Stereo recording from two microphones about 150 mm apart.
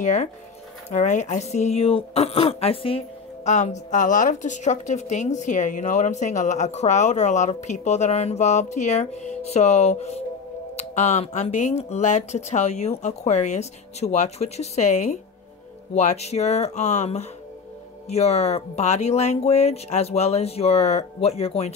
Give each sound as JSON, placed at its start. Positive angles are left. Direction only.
{"t": 0.0, "sound": "a woman's voice", "side_deg": 50}
{"t": 3.4, "sound": "a woman's voice", "side_deg": 50}